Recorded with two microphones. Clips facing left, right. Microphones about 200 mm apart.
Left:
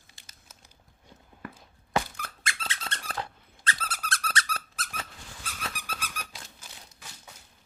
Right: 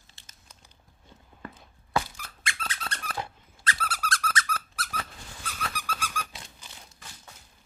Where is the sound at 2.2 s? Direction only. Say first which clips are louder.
Left 1 dB; 45° left (ahead or behind).